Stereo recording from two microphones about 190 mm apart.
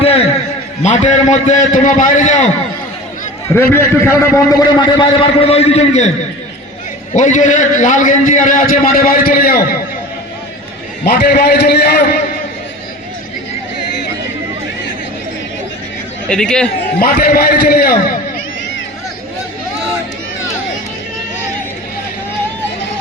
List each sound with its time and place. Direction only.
0.0 s a sound: 30° left (ahead or behind)
0.8 s a man's voice: 40° left (ahead or behind)
3.5 s a man's voice: 10° left (ahead or behind)
4.6 s a man's voice: 25° left (ahead or behind)
7.1 s a man's voice: 40° left (ahead or behind)
11.0 s a man's voice: 55° left (ahead or behind)
16.3 s a man's voice: 5° left (ahead or behind)
17.0 s a man's voice: 50° left (ahead or behind)